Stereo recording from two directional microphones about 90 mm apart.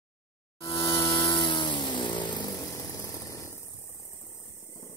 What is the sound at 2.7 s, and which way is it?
Vehicle, 35° left (ahead or behind).